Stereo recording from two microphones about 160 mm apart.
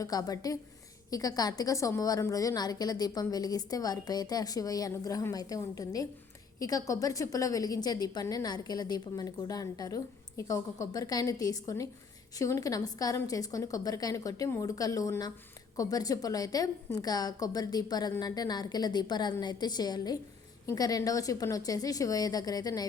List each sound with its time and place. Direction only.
0.0 s a woman's voice: 25° left (ahead or behind)